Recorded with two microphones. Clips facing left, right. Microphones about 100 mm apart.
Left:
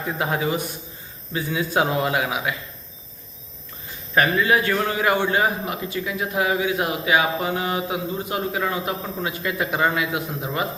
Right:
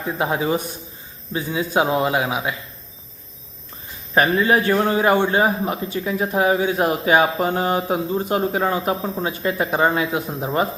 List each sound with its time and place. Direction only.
0.0 s a man's voice: 20° right (ahead or behind)
4.1 s a man's voice: 30° right (ahead or behind)